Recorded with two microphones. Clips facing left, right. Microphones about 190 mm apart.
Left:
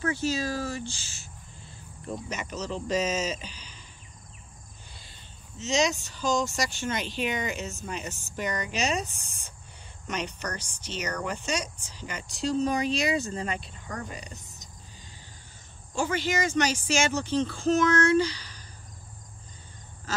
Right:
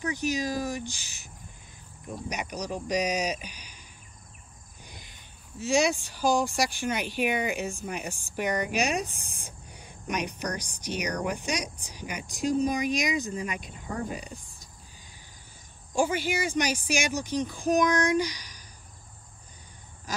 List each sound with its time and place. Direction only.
0.0 s speech: 15° right (ahead or behind)
4.9 s speech: 15° right (ahead or behind)
7.8 s speech: 60° right (ahead or behind)
8.7 s speech: 15° right (ahead or behind)
16.0 s speech: 10° right (ahead or behind)